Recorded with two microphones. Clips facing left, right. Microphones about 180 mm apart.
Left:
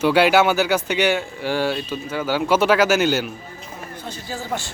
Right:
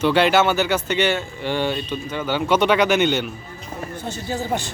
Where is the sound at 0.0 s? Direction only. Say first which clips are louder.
Left 1 dB; 10° left (ahead or behind).